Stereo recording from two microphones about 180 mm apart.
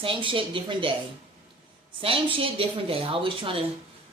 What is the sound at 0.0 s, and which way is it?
Speech, 30° right (ahead or behind).